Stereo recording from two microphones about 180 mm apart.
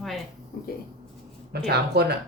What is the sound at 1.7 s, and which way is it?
Speech, 65° right (ahead or behind).